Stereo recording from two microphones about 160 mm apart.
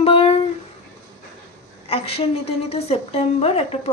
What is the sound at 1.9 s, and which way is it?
A woman's voice, 40° left (ahead or behind).